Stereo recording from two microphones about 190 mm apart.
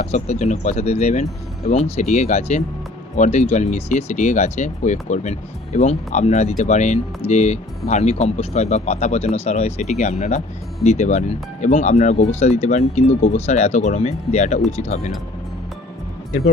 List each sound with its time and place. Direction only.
0.0 s speech: 35° left (ahead or behind)